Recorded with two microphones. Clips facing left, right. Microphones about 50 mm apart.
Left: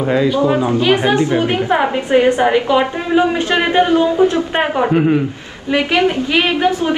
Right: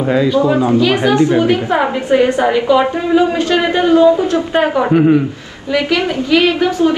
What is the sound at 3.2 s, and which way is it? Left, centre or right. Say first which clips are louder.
Speech: even; left.